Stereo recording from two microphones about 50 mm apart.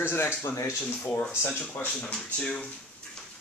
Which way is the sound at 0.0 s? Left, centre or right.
Left.